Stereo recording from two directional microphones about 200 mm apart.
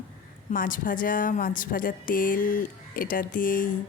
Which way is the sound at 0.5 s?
45° left (ahead or behind).